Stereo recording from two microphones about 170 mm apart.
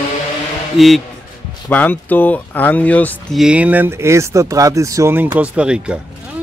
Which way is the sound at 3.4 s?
10° right (ahead or behind).